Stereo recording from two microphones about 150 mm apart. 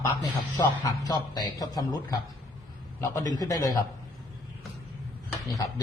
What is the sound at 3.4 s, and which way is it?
Speech, 25° left (ahead or behind).